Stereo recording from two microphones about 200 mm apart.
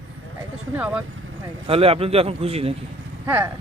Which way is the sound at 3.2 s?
10° right (ahead or behind).